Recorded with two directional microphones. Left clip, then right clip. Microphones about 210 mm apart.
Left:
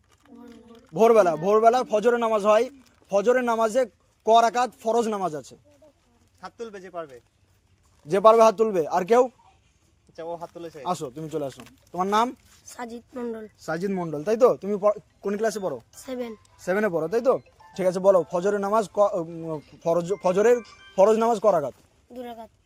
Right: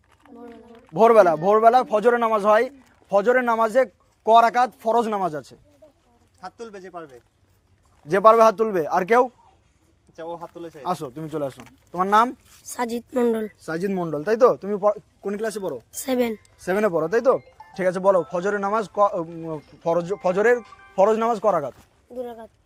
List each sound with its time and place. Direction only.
0.2 s a man's voice: 10° left (ahead or behind)
6.4 s speech: 5° right (ahead or behind)
8.0 s speech: 5° left (ahead or behind)
12.7 s speech: 40° right (ahead or behind)
13.8 s speech: centre (ahead or behind); by 15.8 s 25° left (ahead or behind)
16.0 s a woman's voice: 45° right (ahead or behind)
16.6 s speech: 5° right (ahead or behind)
16.9 s speech: 5° left (ahead or behind); by 21.8 s 25° left (ahead or behind)
22.1 s speech: 60° left (ahead or behind)